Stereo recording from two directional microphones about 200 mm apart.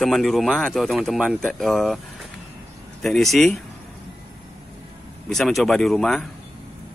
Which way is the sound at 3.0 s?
Centre (ahead or behind).